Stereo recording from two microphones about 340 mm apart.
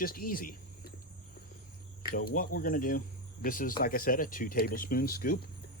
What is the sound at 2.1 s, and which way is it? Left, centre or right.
Speech, left.